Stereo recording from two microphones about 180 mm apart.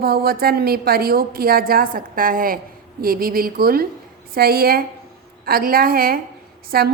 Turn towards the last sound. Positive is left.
turn(degrees=-60)  # may be behind; listen again after turning